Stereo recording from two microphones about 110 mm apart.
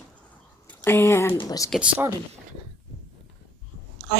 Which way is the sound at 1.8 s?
10° right (ahead or behind).